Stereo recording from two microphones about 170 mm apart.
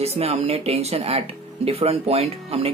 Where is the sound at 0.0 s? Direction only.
35° right (ahead or behind).